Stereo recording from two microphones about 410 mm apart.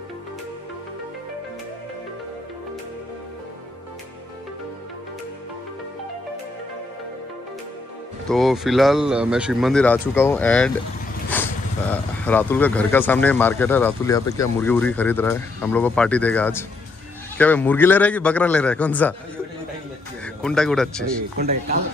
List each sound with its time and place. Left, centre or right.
8.3 s speech: centre
20.4 s speech: centre
21.0 s a man's voice: right